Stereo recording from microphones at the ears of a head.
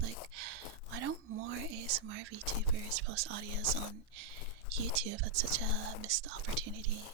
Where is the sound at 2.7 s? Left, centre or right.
Right.